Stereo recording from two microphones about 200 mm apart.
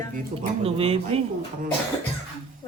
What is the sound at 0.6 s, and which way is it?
Speech, 30° right (ahead or behind).